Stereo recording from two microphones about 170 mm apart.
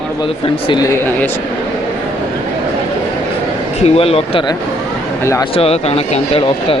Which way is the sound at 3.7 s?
35° left (ahead or behind).